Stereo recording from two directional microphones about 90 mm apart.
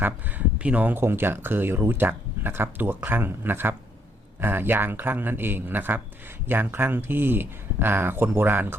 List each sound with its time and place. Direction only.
0.0 s speech: 20° right (ahead or behind)